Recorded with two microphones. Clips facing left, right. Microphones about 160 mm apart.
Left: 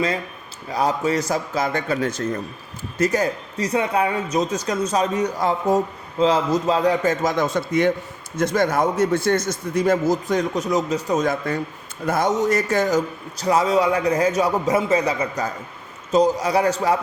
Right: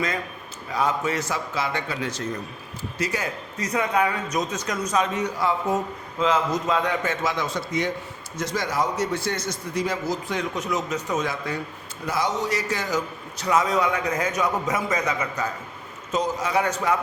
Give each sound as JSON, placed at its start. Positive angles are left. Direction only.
{"t": 0.7, "sound": "a man's voice", "side_deg": 35}
{"t": 11.3, "sound": "a man's voice", "side_deg": 50}